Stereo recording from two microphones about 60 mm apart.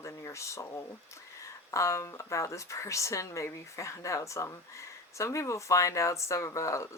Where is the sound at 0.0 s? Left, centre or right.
Left.